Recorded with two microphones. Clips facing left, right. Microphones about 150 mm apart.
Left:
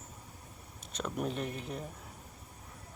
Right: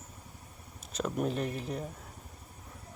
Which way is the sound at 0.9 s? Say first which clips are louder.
Right 4 dB; 5° right (ahead or behind).